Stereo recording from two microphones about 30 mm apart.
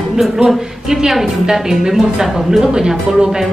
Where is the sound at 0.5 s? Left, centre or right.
Centre.